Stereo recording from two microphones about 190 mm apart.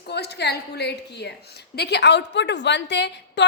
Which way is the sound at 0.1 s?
60° left (ahead or behind).